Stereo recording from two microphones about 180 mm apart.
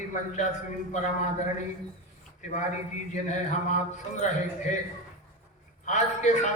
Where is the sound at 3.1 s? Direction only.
40° left (ahead or behind).